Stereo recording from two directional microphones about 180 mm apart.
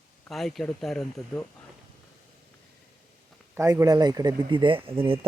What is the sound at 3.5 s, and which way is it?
Speech, 15° right (ahead or behind).